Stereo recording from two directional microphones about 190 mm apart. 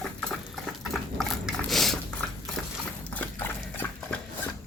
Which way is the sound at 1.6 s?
Centre (ahead or behind).